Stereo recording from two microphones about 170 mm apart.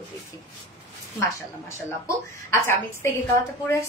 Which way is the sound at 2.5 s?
15° left (ahead or behind).